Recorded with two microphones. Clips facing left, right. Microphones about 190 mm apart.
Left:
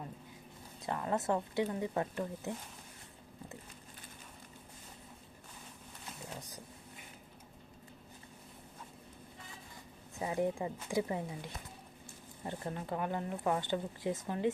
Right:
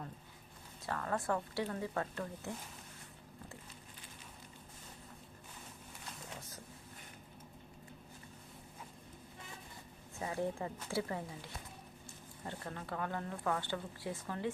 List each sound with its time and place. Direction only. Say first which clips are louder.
0.9 s speech: left 3 dB; 20° left (ahead or behind)
10.2 s speech: left 4 dB; 15° left (ahead or behind)